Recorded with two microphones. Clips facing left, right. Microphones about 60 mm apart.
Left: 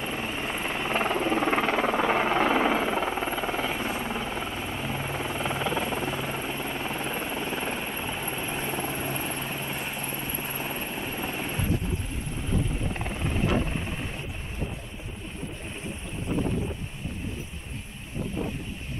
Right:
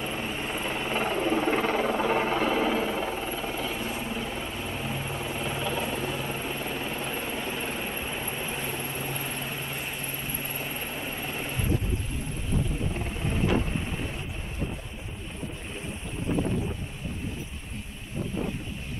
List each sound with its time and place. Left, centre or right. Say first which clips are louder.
0.0 s helicopter: left 1 dB; left